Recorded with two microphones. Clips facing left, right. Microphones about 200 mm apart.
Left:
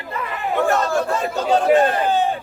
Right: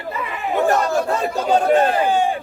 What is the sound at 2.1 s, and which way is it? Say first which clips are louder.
Speech: right 1 dB; 10° right (ahead or behind).